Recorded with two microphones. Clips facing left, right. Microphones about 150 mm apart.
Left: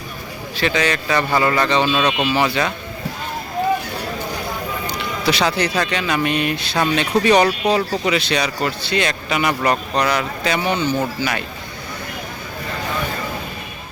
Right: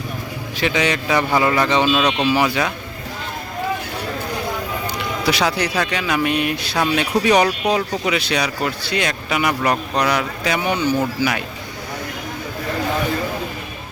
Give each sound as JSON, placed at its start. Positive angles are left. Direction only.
{"t": 0.5, "sound": "speech", "side_deg": -15}
{"t": 1.9, "sound": "speech", "side_deg": 0}
{"t": 5.2, "sound": "speech", "side_deg": -10}